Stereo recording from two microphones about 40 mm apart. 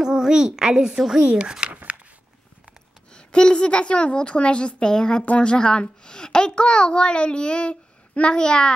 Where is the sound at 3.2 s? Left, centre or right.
Left.